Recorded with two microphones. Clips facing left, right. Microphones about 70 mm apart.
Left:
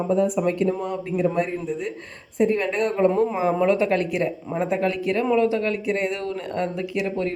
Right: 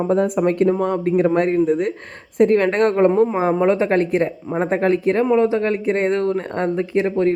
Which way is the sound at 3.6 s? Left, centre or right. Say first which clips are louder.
Right 3 dB; right.